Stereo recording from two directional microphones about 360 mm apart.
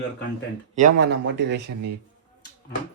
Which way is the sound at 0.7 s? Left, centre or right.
Right.